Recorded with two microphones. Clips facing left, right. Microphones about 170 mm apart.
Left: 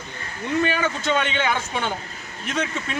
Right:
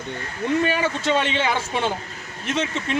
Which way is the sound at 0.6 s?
30° right (ahead or behind).